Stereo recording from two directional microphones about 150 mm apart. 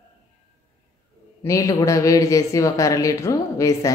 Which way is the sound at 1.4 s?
20° left (ahead or behind).